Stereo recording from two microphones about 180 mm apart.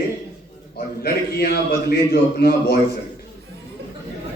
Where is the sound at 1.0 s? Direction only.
55° left (ahead or behind).